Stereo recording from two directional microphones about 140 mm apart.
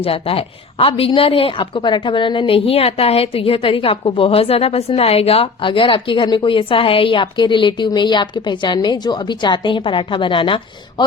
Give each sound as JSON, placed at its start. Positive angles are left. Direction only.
{"t": 0.0, "sound": "a woman's voice", "side_deg": 40}